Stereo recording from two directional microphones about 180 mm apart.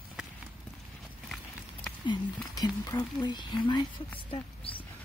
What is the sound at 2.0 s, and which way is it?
Speech, 25° left (ahead or behind).